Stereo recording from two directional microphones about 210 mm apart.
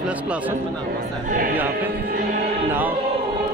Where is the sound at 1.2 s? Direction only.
40° right (ahead or behind).